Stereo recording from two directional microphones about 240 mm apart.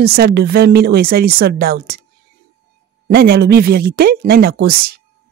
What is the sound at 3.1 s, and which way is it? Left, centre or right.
Speech, right.